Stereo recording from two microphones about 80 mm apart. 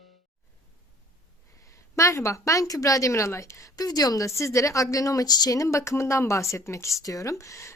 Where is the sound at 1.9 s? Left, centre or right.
Left.